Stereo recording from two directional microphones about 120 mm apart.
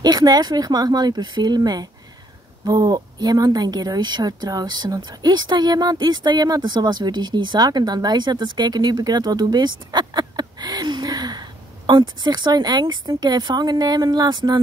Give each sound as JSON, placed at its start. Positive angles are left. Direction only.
{"t": 0.0, "sound": "speech", "side_deg": -35}